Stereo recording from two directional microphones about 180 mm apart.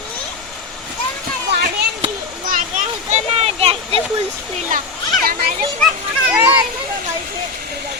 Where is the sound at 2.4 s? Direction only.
50° right (ahead or behind).